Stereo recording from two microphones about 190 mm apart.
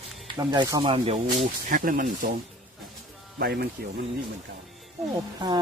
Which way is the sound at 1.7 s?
45° right (ahead or behind).